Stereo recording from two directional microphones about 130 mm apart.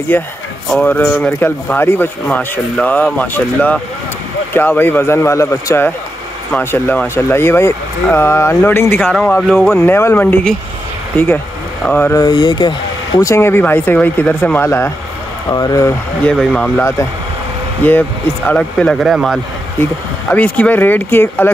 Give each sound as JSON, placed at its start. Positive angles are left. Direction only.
{"t": 0.1, "sound": "speech", "side_deg": 15}
{"t": 9.0, "sound": "speech", "side_deg": 0}
{"t": 11.8, "sound": "speech", "side_deg": 15}
{"t": 12.2, "sound": "speech", "side_deg": 35}
{"t": 13.2, "sound": "speech", "side_deg": 20}
{"t": 15.5, "sound": "speech", "side_deg": 30}
{"t": 16.3, "sound": "speech", "side_deg": 10}
{"t": 18.5, "sound": "speech", "side_deg": 5}
{"t": 20.2, "sound": "speech", "side_deg": 10}